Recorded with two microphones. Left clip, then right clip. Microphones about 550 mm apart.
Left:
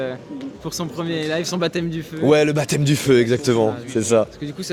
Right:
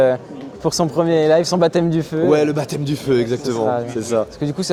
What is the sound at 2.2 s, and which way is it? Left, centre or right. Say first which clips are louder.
Speech: left 1 dB; left.